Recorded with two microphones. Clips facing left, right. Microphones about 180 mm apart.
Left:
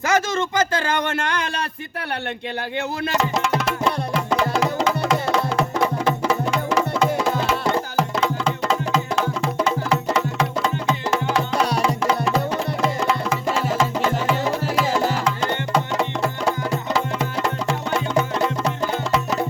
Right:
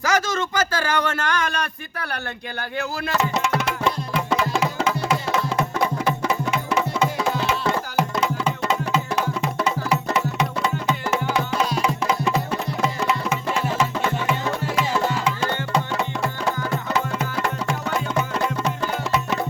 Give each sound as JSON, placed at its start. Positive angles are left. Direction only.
{"t": 0.1, "sound": "speech", "side_deg": 20}
{"t": 2.7, "sound": "speech", "side_deg": 20}